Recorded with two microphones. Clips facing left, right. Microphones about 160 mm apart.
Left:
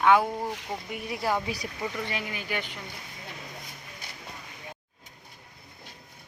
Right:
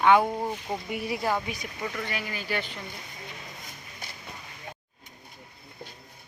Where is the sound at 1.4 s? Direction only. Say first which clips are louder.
Left 2 dB; 35° left (ahead or behind).